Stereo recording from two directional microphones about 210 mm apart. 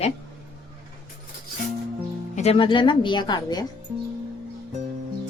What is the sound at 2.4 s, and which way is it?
Speech, 25° left (ahead or behind).